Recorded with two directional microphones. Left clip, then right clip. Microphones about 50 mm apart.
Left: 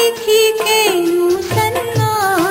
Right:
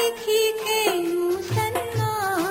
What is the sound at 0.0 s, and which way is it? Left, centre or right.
Music, centre.